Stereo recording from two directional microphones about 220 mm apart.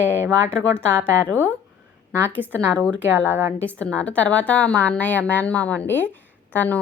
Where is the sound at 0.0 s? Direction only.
10° right (ahead or behind).